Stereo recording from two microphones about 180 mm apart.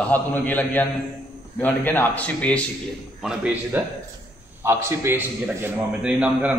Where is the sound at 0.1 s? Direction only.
10° left (ahead or behind).